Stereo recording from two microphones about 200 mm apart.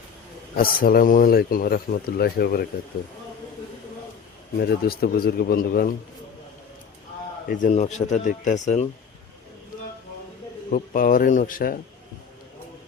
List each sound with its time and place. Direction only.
0.5 s speech: 45° left (ahead or behind)
4.5 s speech: 50° left (ahead or behind)
7.4 s a man's voice: 40° left (ahead or behind)
10.7 s speech: 45° left (ahead or behind)